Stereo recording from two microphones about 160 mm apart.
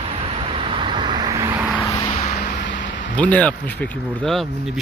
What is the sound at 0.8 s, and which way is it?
Vehicle, 30° right (ahead or behind).